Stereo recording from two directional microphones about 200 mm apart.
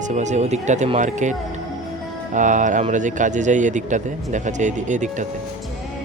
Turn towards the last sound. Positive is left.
turn(degrees=-40)  # may be behind; listen again after turning